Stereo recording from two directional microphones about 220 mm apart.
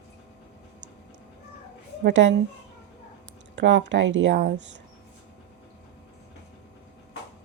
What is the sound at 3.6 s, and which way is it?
Speech, 55° right (ahead or behind).